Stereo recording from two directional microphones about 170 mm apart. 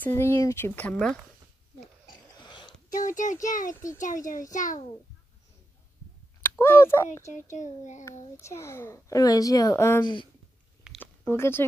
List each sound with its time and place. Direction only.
0.0 s a child's voice: 15° left (ahead or behind)
2.4 s a sound: 25° left (ahead or behind)
2.9 s a child's voice: 50° left (ahead or behind)
6.6 s a child's voice: 15° left (ahead or behind)
7.5 s a child's voice: 45° left (ahead or behind)
8.4 s a child's voice: 15° left (ahead or behind)
11.0 s a sound: 15° left (ahead or behind)